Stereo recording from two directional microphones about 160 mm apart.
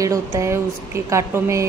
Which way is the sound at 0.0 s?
20° right (ahead or behind).